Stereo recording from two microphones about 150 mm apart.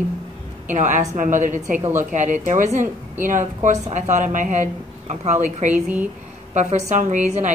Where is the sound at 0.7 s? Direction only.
55° right (ahead or behind).